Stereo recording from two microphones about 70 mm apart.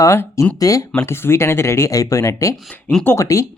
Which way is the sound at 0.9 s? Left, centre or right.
Left.